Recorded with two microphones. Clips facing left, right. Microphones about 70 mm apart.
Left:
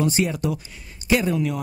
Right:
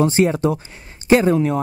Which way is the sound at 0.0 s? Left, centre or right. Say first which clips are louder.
Right 6 dB; right.